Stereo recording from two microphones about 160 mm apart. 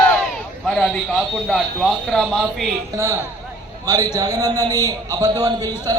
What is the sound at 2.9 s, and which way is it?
A man's voice, 15° right (ahead or behind).